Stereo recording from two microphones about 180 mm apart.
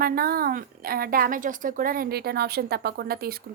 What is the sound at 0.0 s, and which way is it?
A woman's voice, 55° right (ahead or behind).